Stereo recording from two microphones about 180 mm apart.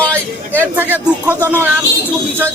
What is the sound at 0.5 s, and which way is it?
Speech, 10° right (ahead or behind).